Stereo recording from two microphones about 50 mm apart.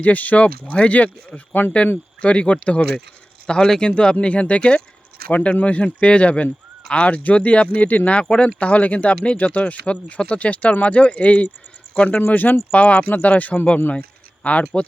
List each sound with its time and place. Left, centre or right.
0.0 s speech: left
2.2 s speech: left
3.4 s speech: centre